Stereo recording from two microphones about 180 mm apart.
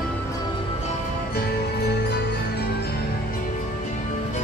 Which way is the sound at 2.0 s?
65° left (ahead or behind).